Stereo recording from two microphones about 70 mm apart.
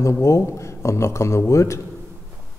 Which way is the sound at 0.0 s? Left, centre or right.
Left.